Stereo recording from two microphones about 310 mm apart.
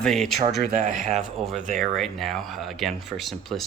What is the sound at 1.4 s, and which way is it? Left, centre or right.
Speech, centre.